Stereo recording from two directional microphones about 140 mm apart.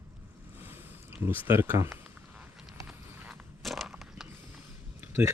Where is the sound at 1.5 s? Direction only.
15° right (ahead or behind).